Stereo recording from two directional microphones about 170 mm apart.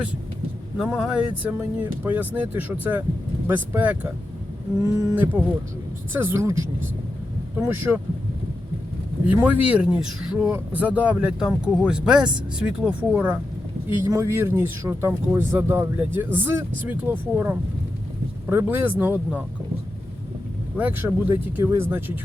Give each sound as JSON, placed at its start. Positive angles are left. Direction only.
{"t": 0.8, "sound": "speech", "side_deg": -5}
{"t": 7.6, "sound": "speech", "side_deg": -15}
{"t": 9.2, "sound": "speech", "side_deg": -10}
{"t": 20.7, "sound": "speech", "side_deg": -10}